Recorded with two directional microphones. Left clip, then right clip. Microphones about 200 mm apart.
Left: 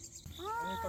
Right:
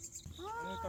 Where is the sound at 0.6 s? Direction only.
30° right (ahead or behind).